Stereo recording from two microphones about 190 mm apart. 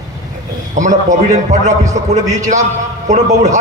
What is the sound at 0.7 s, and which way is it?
A man's voice, 40° right (ahead or behind).